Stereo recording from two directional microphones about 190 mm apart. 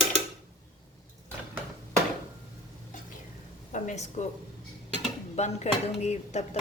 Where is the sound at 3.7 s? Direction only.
40° left (ahead or behind).